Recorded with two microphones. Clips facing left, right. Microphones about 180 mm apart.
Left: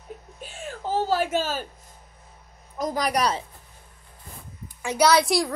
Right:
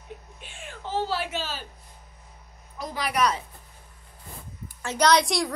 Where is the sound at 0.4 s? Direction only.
40° left (ahead or behind).